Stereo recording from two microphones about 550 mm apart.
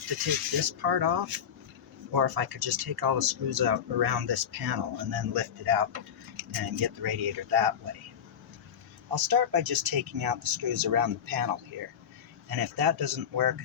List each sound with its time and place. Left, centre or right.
0.3 s speech: right
9.1 s speech: right